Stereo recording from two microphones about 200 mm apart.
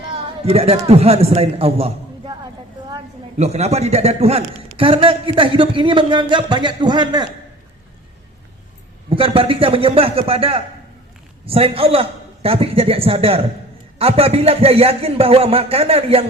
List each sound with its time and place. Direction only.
0.4 s a man's voice: 30° right (ahead or behind)
3.3 s a man's voice: 35° right (ahead or behind)
9.0 s speech: 25° right (ahead or behind)